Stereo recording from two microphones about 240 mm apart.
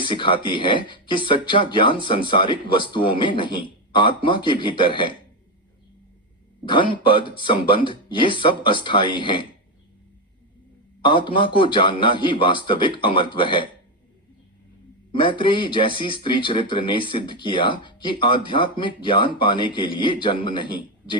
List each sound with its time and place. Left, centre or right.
0.0 s speech: centre
6.7 s speech: centre
11.0 s speech: left
15.1 s speech: left